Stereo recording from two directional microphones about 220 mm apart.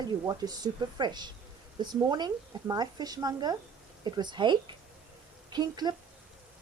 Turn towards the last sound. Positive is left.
turn(degrees=-20)  # may be behind; listen again after turning